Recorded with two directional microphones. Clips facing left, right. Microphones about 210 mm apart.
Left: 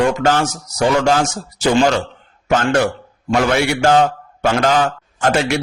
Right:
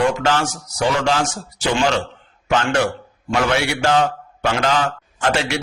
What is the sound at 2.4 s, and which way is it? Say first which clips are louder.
A man's voice: left 3 dB; 45° left (ahead or behind).